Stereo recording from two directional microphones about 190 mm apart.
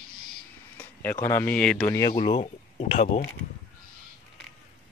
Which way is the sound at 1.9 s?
20° left (ahead or behind).